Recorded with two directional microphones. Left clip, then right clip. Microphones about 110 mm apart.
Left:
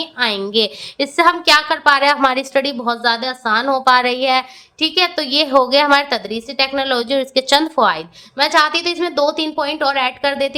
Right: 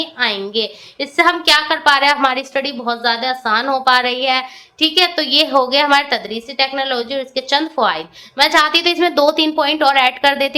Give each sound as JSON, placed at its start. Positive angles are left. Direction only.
{"t": 0.0, "sound": "a woman's voice", "side_deg": 45}
{"t": 1.2, "sound": "a woman's voice", "side_deg": 25}
{"t": 8.4, "sound": "a woman's voice", "side_deg": 15}